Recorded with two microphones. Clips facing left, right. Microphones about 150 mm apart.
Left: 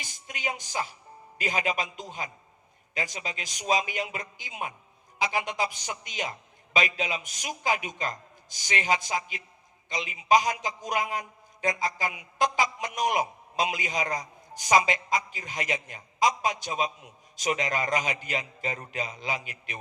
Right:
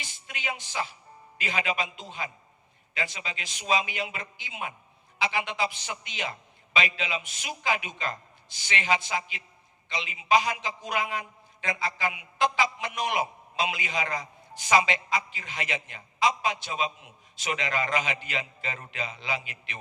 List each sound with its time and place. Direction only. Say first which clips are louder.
0.0 s a man's voice: left 2 dB; 45° left (ahead or behind)